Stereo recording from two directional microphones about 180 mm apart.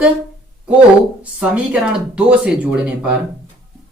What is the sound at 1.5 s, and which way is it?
Speech, 5° right (ahead or behind).